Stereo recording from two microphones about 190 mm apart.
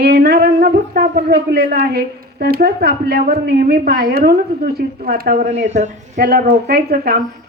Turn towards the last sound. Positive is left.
turn(degrees=-55)  # may be behind; listen again after turning